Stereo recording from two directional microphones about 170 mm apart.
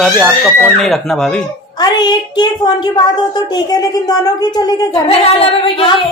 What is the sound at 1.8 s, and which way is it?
A woman's voice, 25° left (ahead or behind).